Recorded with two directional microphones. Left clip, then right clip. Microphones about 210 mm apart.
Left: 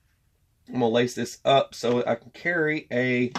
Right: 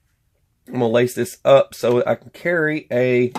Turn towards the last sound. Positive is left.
turn(degrees=-50)  # may be behind; listen again after turning